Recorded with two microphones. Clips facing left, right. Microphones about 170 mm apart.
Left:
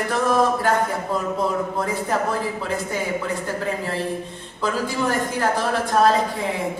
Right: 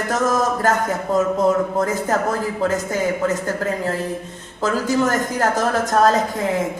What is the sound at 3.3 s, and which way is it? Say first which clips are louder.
A man's voice: right 3 dB; 45° right (ahead or behind).